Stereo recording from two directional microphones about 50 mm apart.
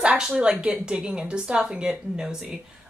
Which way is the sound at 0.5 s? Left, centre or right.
Right.